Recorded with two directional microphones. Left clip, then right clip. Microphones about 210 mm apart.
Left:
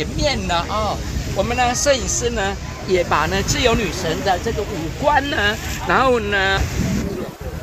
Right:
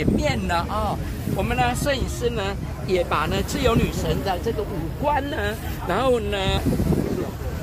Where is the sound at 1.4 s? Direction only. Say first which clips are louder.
Left 5 dB; 30° left (ahead or behind).